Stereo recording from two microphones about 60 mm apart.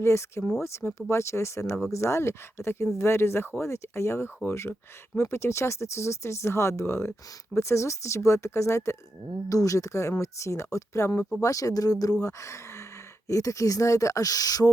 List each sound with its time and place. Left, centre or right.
0.0 s speech: left
9.5 s speech: left
12.2 s speech: left